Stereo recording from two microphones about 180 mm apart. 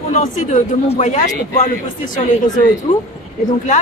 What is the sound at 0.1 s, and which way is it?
Speech, 45° left (ahead or behind).